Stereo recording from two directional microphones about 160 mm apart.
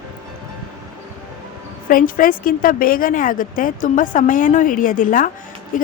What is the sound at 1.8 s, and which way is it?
A woman's voice, 60° left (ahead or behind).